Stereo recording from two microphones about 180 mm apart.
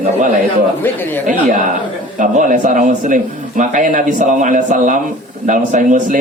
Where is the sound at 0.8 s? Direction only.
10° left (ahead or behind).